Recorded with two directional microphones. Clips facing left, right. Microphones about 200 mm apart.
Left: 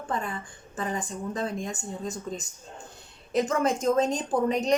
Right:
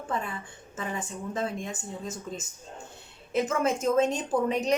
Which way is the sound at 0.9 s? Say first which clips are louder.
Left 2 dB; 5° right (ahead or behind).